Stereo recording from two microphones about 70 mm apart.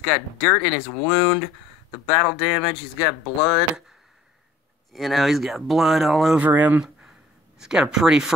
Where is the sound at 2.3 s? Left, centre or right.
Centre.